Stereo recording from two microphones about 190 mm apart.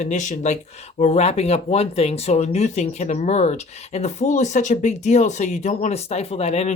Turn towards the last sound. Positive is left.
turn(degrees=35)  # may be behind; listen again after turning